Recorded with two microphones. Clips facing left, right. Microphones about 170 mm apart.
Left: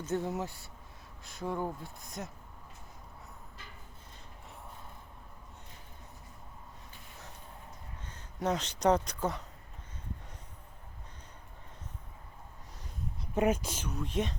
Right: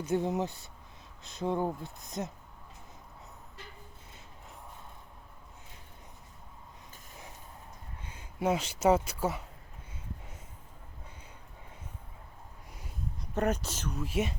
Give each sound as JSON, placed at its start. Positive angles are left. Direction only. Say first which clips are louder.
{"t": 0.0, "sound": "speech", "louder": "right 4 dB", "side_deg": -15}
{"t": 8.0, "sound": "speech", "louder": "right 3 dB", "side_deg": -10}
{"t": 13.3, "sound": "speech", "louder": "left 2 dB", "side_deg": 10}
{"t": 13.9, "sound": "speech", "louder": "right 1 dB", "side_deg": -5}